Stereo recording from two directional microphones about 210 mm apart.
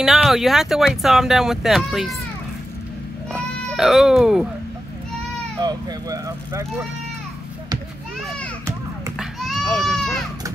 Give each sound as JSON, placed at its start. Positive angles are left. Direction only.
{"t": 0.0, "sound": "speech", "side_deg": 0}
{"t": 3.6, "sound": "speech", "side_deg": 0}
{"t": 5.6, "sound": "speech", "side_deg": -20}
{"t": 9.2, "sound": "goat", "side_deg": 0}